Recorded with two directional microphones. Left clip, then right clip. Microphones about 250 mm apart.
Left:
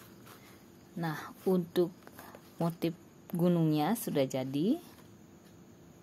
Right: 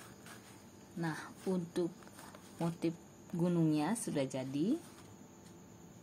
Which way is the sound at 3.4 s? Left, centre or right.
Left.